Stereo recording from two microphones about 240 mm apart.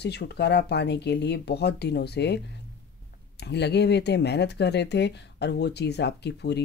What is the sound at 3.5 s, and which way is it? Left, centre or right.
Speech, left.